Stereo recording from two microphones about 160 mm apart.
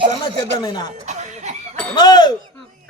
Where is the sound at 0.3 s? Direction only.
25° left (ahead or behind).